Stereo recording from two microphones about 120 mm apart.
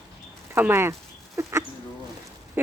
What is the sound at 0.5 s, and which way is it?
Speech, 20° right (ahead or behind).